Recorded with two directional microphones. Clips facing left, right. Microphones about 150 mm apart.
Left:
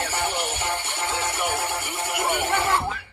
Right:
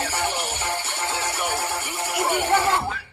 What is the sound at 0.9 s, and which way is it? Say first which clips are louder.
Music: even; 30° right (ahead or behind).